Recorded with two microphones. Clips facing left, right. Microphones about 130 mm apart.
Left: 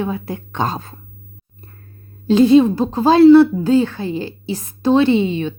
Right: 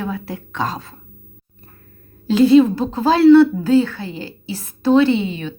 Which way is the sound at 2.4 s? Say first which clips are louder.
Even; 20° left (ahead or behind).